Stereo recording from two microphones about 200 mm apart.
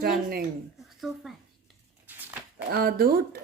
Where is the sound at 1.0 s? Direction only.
Centre (ahead or behind).